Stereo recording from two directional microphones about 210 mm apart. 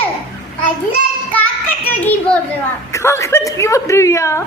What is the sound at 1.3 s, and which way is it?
Child singing, 10° left (ahead or behind).